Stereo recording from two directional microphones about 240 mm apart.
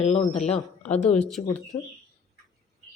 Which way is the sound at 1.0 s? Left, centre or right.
Centre.